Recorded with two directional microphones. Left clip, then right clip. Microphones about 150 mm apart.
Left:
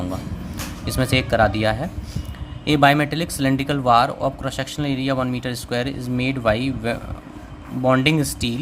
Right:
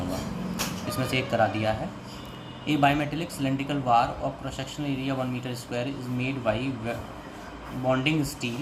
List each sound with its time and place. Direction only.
0.9 s speech: 90° left